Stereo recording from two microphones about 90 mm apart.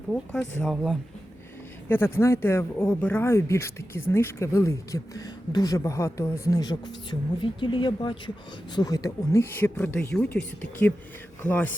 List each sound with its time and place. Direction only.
0.3 s speech: centre (ahead or behind)
1.9 s speech: 25° left (ahead or behind)
3.2 s a woman's voice: 30° left (ahead or behind); by 8.2 s 60° left (ahead or behind)
8.7 s a woman's voice: 45° left (ahead or behind); by 11.7 s 20° left (ahead or behind)